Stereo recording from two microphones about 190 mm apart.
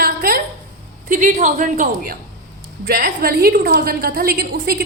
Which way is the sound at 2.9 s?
55° right (ahead or behind).